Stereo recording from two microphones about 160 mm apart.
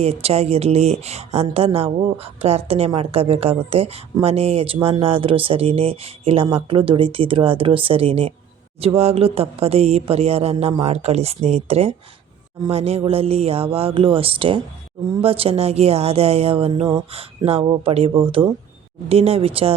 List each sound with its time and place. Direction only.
0.0 s speech: 40° right (ahead or behind)